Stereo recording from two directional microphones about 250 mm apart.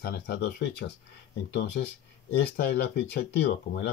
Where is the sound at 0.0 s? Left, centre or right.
Left.